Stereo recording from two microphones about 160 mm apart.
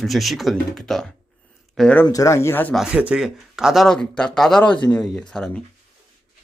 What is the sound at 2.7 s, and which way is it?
Speech, 5° right (ahead or behind).